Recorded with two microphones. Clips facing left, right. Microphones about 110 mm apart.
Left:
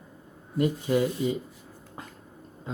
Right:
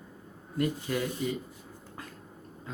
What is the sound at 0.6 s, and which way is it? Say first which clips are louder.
Speech: left 6 dB; 20° left (ahead or behind).